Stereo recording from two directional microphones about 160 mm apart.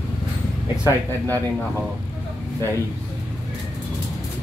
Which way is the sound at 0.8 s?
15° left (ahead or behind).